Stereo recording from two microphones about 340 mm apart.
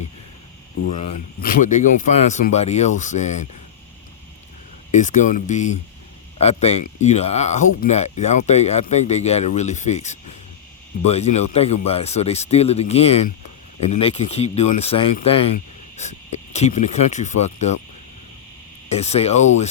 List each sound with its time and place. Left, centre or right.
0.9 s speech: left
4.9 s speech: left
18.9 s speech: centre